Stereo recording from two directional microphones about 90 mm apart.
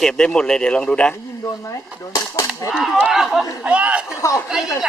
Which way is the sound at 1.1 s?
35° left (ahead or behind).